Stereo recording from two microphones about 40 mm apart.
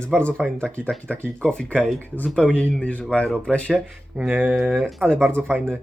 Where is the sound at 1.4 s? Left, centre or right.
Left.